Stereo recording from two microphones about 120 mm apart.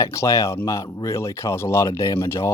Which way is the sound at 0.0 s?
25° left (ahead or behind).